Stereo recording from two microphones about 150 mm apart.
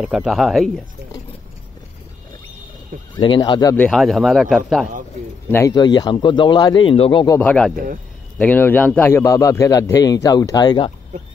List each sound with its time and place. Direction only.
0.0 s speech: 5° right (ahead or behind)
3.2 s a man's voice: 30° left (ahead or behind)
3.9 s speech: centre (ahead or behind)
5.5 s a man's voice: 20° left (ahead or behind)
7.2 s speech: 15° left (ahead or behind)
7.7 s speech: 65° right (ahead or behind)
8.4 s a man's voice: 10° left (ahead or behind); by 10.9 s 25° left (ahead or behind)